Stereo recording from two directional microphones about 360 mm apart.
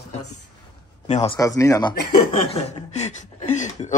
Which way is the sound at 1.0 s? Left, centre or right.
Centre.